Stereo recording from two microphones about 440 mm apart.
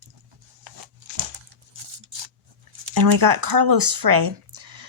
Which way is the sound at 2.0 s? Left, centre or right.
Right.